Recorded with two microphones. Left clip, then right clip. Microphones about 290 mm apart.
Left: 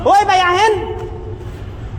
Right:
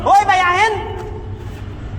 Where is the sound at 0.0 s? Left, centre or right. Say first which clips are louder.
Left 1 dB; left.